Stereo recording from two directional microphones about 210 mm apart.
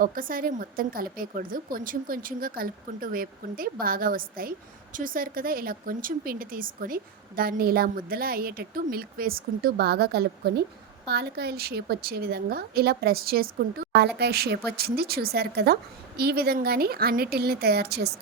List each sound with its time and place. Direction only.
0.0 s speech: 40° right (ahead or behind)